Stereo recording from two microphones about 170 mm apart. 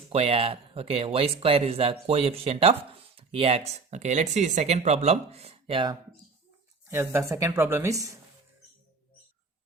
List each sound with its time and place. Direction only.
0.1 s speech: 35° right (ahead or behind)
6.8 s speech: 15° right (ahead or behind)